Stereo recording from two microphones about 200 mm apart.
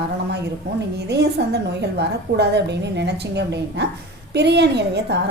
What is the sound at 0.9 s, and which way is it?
A woman's voice, 55° right (ahead or behind).